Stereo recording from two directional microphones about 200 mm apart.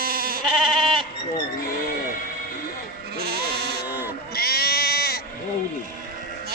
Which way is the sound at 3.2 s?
50° right (ahead or behind).